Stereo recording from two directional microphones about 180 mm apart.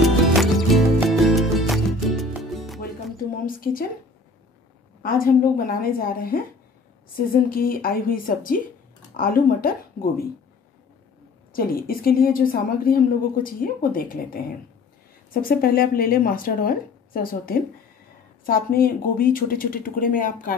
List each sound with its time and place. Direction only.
0.0 s music: centre (ahead or behind)
3.4 s a sound: 50° left (ahead or behind)
5.0 s a woman's voice: 50° left (ahead or behind)
11.5 s a woman's voice: 55° left (ahead or behind)